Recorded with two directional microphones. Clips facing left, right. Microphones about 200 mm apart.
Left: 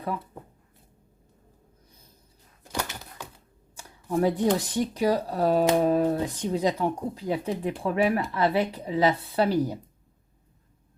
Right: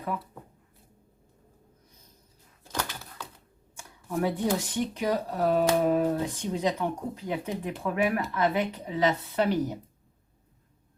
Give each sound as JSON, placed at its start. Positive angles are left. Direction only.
{"t": 2.7, "sound": "typewriter", "side_deg": 15}
{"t": 3.8, "sound": "a sound", "side_deg": 35}
{"t": 4.6, "sound": "speech", "side_deg": 35}